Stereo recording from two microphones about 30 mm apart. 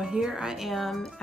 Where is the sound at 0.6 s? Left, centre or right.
Centre.